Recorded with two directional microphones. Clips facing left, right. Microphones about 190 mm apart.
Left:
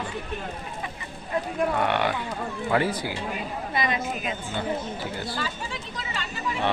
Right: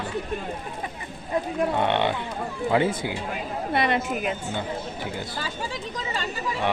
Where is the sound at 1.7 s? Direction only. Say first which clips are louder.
Right 3 dB; 20° right (ahead or behind).